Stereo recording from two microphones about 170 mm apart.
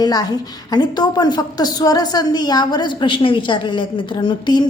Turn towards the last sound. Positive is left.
turn(degrees=25)  # may be behind; listen again after turning